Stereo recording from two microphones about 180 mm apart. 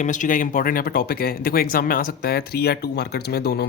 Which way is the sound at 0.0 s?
45° left (ahead or behind).